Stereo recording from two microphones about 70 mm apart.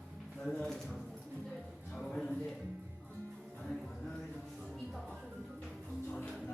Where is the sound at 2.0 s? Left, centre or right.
Centre.